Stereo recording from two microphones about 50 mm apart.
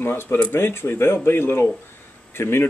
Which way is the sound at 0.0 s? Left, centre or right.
Left.